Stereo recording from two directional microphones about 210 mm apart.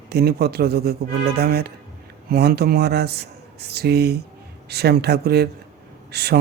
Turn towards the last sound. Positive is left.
turn(degrees=-50)  # may be behind; listen again after turning